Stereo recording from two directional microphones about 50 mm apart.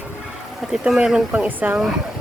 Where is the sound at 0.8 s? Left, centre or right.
Centre.